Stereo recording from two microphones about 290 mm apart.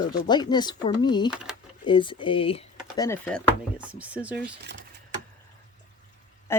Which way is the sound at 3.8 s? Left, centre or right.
Centre.